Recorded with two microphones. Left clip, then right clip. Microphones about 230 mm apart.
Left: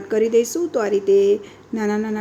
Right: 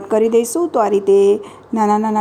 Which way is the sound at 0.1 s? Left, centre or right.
Centre.